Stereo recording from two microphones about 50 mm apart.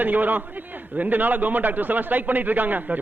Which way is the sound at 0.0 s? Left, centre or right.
Right.